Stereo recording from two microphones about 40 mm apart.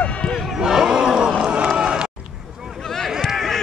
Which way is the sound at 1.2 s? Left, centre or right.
Right.